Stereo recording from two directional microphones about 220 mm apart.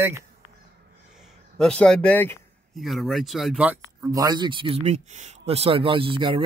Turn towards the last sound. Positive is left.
turn(degrees=-20)  # may be behind; listen again after turning